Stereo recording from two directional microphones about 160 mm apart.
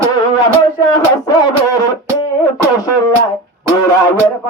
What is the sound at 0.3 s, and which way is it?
Music, 25° left (ahead or behind).